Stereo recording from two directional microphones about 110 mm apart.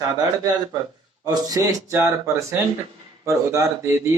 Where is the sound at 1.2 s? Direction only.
35° right (ahead or behind).